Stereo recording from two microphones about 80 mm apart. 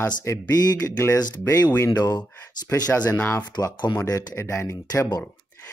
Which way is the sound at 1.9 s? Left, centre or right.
Left.